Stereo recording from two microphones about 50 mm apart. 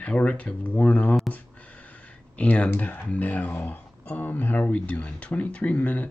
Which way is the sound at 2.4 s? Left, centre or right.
Left.